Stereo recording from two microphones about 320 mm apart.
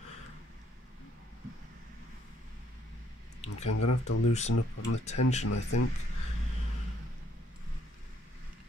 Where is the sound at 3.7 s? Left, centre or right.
Left.